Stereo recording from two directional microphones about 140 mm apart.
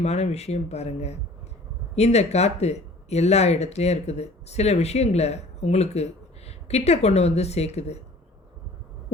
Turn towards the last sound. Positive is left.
turn(degrees=50)  # may be behind; listen again after turning